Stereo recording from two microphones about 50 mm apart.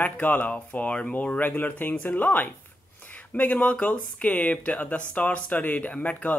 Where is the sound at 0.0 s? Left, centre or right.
Left.